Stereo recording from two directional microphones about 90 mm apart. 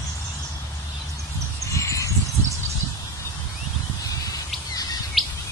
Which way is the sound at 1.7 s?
35° left (ahead or behind).